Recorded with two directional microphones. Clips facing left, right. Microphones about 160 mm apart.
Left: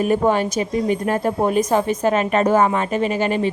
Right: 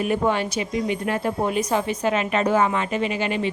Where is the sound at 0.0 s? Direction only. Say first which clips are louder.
Left 4 dB; 40° left (ahead or behind).